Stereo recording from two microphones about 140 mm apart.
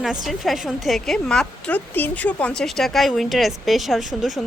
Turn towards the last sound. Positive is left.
turn(degrees=0)  # may be behind; listen again after turning